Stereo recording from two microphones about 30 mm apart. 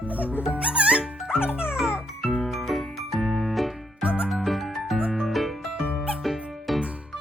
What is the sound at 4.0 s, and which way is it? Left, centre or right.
Music, right.